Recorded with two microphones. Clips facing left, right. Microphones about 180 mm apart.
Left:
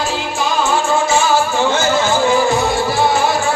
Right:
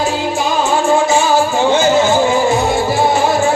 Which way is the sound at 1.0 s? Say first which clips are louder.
Right 2 dB; 15° right (ahead or behind).